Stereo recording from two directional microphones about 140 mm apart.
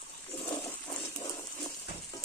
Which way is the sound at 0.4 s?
15° left (ahead or behind).